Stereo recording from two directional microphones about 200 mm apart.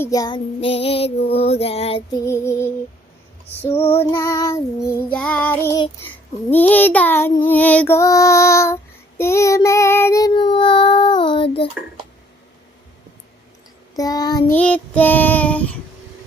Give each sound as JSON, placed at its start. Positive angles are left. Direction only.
{"t": 0.0, "sound": "female singing", "side_deg": 15}
{"t": 2.1, "sound": "child singing", "side_deg": 15}
{"t": 3.6, "sound": "female singing", "side_deg": 30}
{"t": 4.2, "sound": "child singing", "side_deg": 20}
{"t": 6.5, "sound": "child singing", "side_deg": 10}
{"t": 7.4, "sound": "female singing", "side_deg": 10}
{"t": 13.9, "sound": "female singing", "side_deg": 20}
{"t": 14.5, "sound": "child singing", "side_deg": 5}